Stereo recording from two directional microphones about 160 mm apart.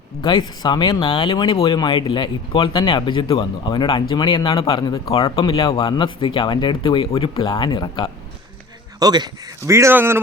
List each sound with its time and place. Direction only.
0.2 s speech: 25° left (ahead or behind)
5.1 s speech: 35° left (ahead or behind)
9.0 s speech: 25° right (ahead or behind)